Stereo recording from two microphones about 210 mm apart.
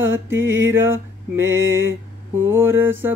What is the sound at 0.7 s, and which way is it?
Mantra, 10° right (ahead or behind).